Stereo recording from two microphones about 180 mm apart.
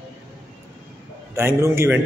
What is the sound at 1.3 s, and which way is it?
Speech, 15° right (ahead or behind).